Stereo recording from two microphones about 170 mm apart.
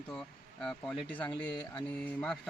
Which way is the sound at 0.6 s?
5° left (ahead or behind).